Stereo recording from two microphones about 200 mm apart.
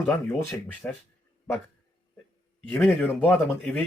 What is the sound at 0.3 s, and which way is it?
Speech, 10° left (ahead or behind).